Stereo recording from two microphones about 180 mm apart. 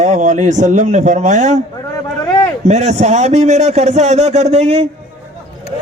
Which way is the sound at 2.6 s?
40° right (ahead or behind).